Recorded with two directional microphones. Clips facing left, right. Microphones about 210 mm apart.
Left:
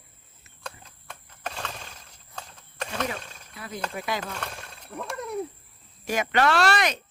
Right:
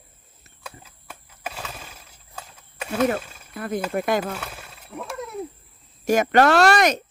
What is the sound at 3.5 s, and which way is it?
Speech, 50° right (ahead or behind).